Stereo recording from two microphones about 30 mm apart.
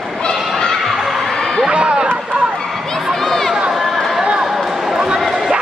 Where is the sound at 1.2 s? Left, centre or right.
Centre.